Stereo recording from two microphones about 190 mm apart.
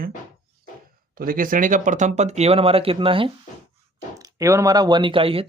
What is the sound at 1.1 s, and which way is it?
Speech, 50° right (ahead or behind).